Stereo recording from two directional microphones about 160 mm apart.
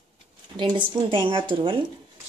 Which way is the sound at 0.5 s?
30° right (ahead or behind).